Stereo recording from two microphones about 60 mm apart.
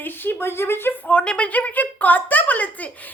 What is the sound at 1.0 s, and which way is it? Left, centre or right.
A woman's voice, centre.